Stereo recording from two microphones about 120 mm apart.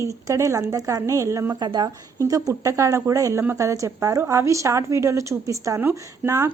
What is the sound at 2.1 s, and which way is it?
A woman's voice, 25° right (ahead or behind).